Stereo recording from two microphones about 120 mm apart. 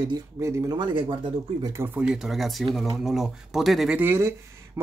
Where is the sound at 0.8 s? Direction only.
40° right (ahead or behind).